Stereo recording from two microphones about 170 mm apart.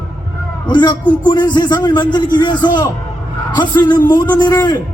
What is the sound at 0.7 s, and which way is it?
Speech, 25° left (ahead or behind).